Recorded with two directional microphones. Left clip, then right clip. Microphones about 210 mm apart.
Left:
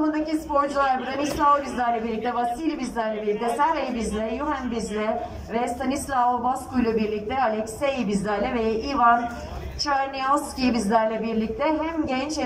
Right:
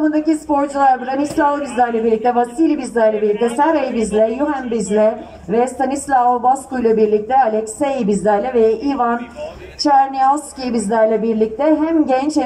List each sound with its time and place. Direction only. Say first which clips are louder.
0.1 s a woman's voice: right 7 dB; 40° right (ahead or behind)